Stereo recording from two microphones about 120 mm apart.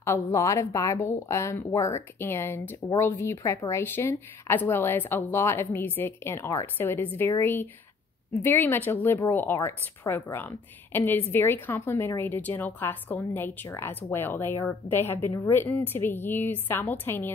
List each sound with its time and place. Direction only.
0.0 s a woman's voice: 25° left (ahead or behind)